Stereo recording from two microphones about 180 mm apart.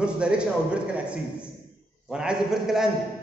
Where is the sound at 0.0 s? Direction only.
5° right (ahead or behind).